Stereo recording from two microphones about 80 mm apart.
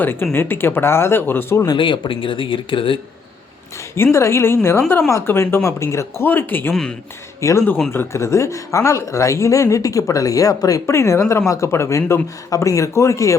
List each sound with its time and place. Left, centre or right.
0.0 s speech: left
1.7 s speech: left
3.9 s speech: left
6.2 s speech: left
7.4 s speech: left